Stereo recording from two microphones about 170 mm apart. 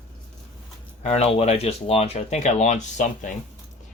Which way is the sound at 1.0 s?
35° left (ahead or behind).